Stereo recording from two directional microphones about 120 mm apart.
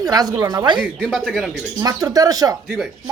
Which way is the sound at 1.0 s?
Centre (ahead or behind).